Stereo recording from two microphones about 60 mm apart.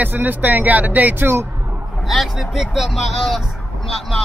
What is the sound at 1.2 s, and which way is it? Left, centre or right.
Speech, right.